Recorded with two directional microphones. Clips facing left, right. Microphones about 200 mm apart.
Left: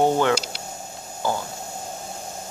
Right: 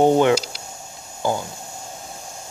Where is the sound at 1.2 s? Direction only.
15° right (ahead or behind).